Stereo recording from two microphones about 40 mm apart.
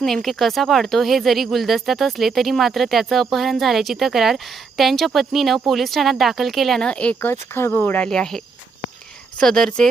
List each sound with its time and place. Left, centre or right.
0.0 s speech: centre
6.8 s speech: left
7.2 s speech: left
7.7 s speech: left
8.0 s speech: centre
9.4 s speech: centre